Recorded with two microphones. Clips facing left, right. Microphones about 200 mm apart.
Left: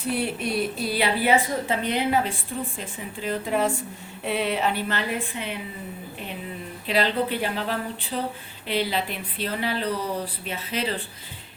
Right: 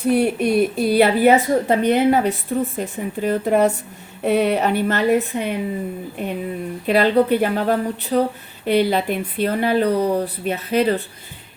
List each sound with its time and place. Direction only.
0.1 s speech: 55° right (ahead or behind)
6.8 s speech: 50° right (ahead or behind)